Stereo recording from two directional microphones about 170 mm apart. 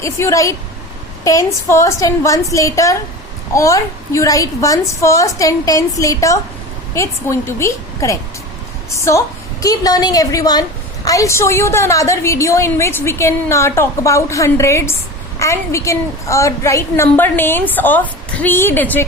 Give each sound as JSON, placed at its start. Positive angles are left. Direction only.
{"t": 0.0, "sound": "a woman's voice", "side_deg": 15}